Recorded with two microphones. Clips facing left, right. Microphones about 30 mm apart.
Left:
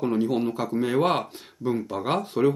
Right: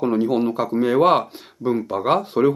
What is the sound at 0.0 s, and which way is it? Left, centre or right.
Speech, centre.